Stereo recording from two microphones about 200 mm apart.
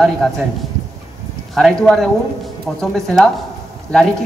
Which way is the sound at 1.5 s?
Centre (ahead or behind).